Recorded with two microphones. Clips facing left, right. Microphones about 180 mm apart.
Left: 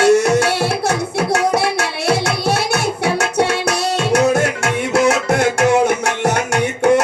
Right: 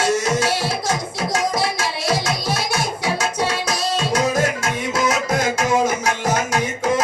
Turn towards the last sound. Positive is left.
turn(degrees=65)  # may be behind; listen again after turning